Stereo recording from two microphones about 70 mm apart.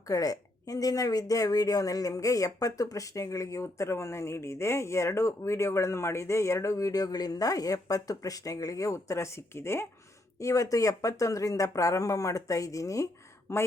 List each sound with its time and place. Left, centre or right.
0.1 s speech: left
10.4 s speech: left
13.5 s speech: left